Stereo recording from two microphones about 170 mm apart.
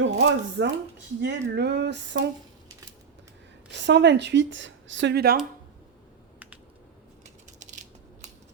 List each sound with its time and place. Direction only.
0.0 s speech: 90° right
1.2 s speech: 80° right
3.7 s speech: 90° right; by 5.4 s 65° right (ahead or behind)